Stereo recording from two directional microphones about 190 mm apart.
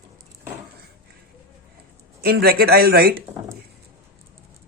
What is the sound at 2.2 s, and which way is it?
Speech, 55° right (ahead or behind).